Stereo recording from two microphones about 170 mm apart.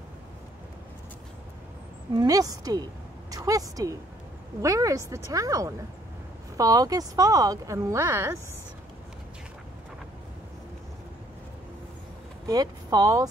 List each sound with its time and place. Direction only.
2.1 s a woman's voice: 20° right (ahead or behind)
12.4 s speech: 25° right (ahead or behind)